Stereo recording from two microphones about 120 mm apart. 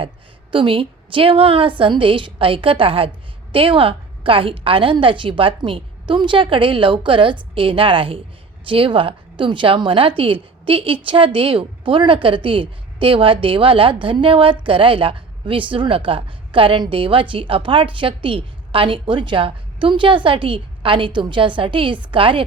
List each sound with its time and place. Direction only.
0.5 s a woman's voice: 45° right (ahead or behind)